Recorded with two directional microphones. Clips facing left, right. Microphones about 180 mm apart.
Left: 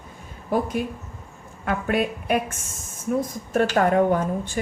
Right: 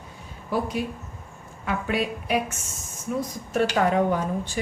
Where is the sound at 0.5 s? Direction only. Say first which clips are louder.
Left 3 dB; 50° left (ahead or behind).